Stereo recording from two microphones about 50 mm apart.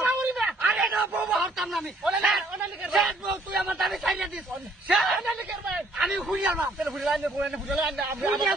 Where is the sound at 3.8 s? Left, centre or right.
Centre.